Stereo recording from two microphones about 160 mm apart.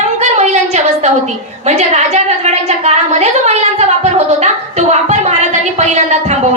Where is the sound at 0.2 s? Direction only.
45° right (ahead or behind).